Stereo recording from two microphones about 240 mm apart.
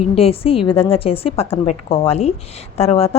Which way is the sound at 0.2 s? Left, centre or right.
Left.